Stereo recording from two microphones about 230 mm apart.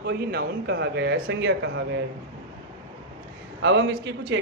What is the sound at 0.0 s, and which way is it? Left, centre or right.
A man's voice, right.